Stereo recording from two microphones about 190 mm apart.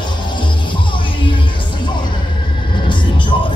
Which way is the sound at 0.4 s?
25° left (ahead or behind).